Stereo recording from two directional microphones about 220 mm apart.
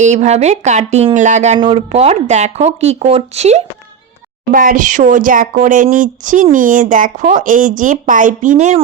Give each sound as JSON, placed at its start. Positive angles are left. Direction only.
{"t": 0.0, "sound": "speech", "side_deg": -30}